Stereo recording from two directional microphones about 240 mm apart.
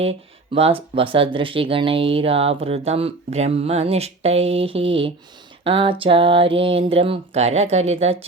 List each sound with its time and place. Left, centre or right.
0.0 s speech: right